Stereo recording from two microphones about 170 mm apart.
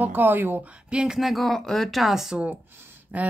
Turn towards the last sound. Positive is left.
turn(degrees=-10)  # may be behind; listen again after turning